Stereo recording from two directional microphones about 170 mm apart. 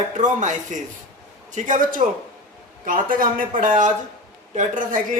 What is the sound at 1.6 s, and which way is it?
A man's voice, 50° right (ahead or behind).